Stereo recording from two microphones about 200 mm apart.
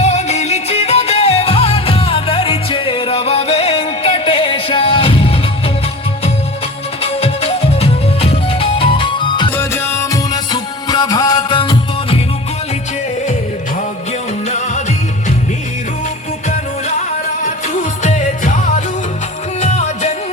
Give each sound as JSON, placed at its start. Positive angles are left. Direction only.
{"t": 0.0, "sound": "music", "side_deg": 35}
{"t": 7.0, "sound": "music", "side_deg": 30}
{"t": 9.5, "sound": "music", "side_deg": 10}
{"t": 17.2, "sound": "music", "side_deg": 40}